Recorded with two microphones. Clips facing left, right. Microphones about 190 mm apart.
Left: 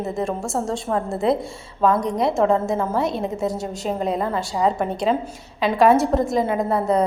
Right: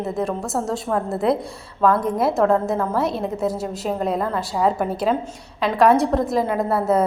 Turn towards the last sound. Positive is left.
turn(degrees=-5)  # may be behind; listen again after turning